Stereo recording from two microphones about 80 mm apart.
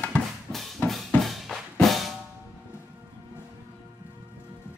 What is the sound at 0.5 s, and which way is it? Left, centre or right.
Music, centre.